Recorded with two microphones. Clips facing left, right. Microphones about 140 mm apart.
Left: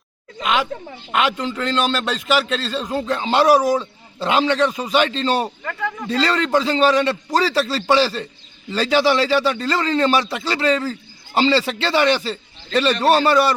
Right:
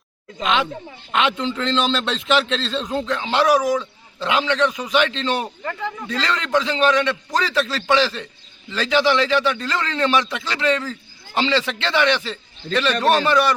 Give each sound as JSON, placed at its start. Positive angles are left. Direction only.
{"t": 0.4, "sound": "a man's voice", "side_deg": 5}
{"t": 3.1, "sound": "a man's voice", "side_deg": 40}